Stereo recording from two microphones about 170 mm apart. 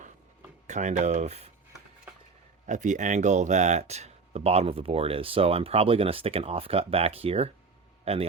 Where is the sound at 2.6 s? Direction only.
45° right (ahead or behind).